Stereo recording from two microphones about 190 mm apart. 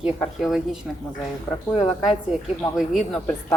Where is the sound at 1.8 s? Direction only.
30° left (ahead or behind).